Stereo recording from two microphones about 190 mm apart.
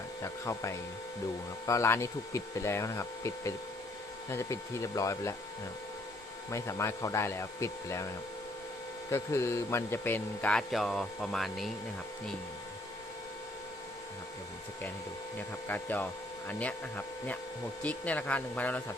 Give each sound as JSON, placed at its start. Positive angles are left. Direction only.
{"t": 0.2, "sound": "speech", "side_deg": 15}
{"t": 6.5, "sound": "speech", "side_deg": 15}
{"t": 15.4, "sound": "speech", "side_deg": 10}